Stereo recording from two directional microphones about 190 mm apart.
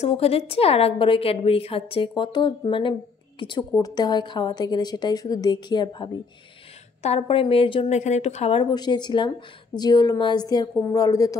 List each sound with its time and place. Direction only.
0.0 s a woman's voice: 30° left (ahead or behind)
7.0 s a woman's voice: 35° left (ahead or behind); by 11.3 s 20° left (ahead or behind)